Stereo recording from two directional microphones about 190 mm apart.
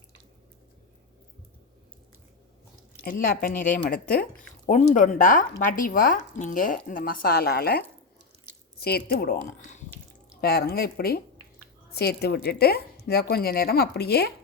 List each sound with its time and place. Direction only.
3.0 s speech: 50° left (ahead or behind)
10.4 s speech: 55° left (ahead or behind)